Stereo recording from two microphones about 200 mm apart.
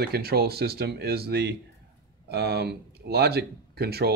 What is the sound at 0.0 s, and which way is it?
Speech, 50° right (ahead or behind).